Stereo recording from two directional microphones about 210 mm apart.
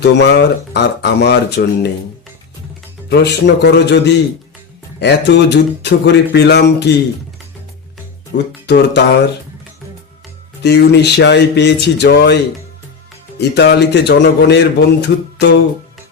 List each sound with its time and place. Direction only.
0.0 s speech: 55° left (ahead or behind)
3.1 s speech: 50° left (ahead or behind)
8.6 s a sound: 55° left (ahead or behind)
10.6 s speech: 55° left (ahead or behind)
13.4 s speech: 55° left (ahead or behind)